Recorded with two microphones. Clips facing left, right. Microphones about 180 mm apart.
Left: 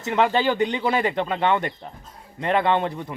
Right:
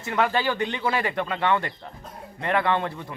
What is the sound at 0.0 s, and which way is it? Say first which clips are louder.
Speech: left 3 dB; 20° left (ahead or behind).